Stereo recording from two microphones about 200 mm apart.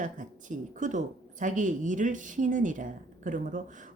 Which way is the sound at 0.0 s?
40° right (ahead or behind).